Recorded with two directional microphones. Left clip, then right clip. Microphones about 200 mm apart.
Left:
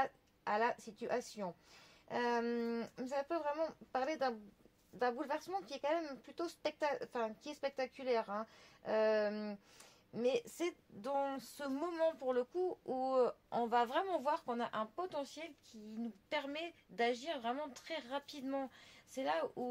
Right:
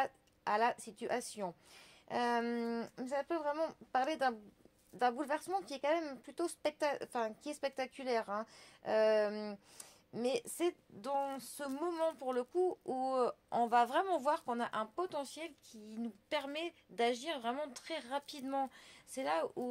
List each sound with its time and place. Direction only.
0.0 s a woman's voice: 40° right (ahead or behind)